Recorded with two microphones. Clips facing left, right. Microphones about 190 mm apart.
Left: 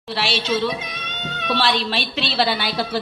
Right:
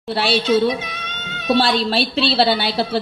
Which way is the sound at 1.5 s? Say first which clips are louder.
Right 5 dB; 35° right (ahead or behind).